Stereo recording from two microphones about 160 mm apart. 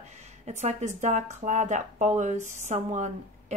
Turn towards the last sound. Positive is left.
turn(degrees=-45)  # may be behind; listen again after turning